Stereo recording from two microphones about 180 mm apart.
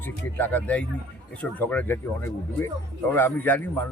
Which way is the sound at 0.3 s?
10° left (ahead or behind).